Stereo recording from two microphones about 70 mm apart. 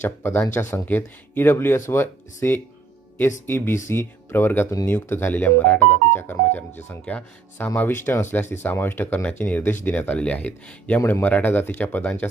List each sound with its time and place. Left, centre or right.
0.0 s speech: left
7.0 s speech: centre
7.8 s speech: left